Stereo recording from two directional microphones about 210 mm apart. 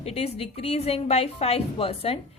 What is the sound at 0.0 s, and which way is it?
A woman's voice, 30° left (ahead or behind).